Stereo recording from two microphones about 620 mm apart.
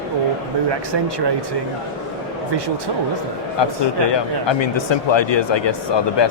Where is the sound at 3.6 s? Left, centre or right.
Left.